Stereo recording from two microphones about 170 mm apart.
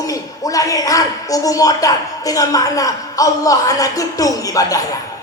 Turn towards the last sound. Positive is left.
turn(degrees=20)  # may be behind; listen again after turning